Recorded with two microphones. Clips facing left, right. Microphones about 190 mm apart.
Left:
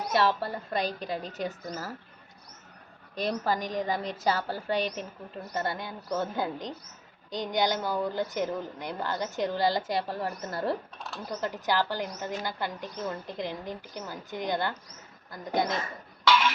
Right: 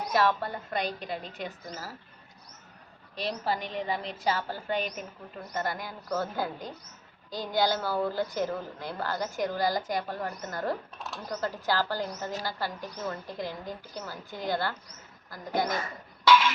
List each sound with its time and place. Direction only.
0.1 s a woman's voice: 30° left (ahead or behind); by 1.9 s 45° left (ahead or behind)
3.2 s a woman's voice: 45° left (ahead or behind)
5.5 s a woman's voice: 25° left (ahead or behind)
11.3 s a woman's voice: 20° left (ahead or behind)